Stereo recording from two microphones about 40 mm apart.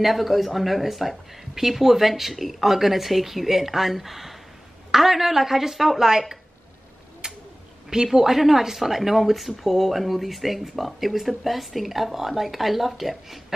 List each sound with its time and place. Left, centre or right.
0.0 s a woman's voice: centre
7.2 s tick-tock: centre
7.9 s a woman's voice: centre